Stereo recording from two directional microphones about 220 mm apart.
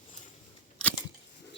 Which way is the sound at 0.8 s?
5° left (ahead or behind).